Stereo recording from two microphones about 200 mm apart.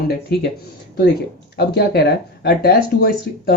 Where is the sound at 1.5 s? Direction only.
55° left (ahead or behind).